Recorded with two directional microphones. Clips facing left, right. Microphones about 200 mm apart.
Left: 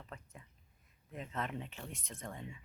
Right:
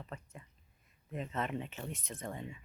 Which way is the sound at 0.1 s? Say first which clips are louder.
Right 4 dB; centre (ahead or behind).